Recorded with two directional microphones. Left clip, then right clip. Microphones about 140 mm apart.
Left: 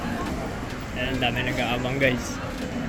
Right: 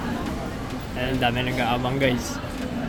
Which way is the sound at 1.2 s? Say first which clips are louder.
Right 2 dB; 45° right (ahead or behind).